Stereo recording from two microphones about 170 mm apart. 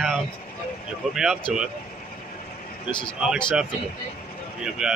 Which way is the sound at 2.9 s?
5° right (ahead or behind).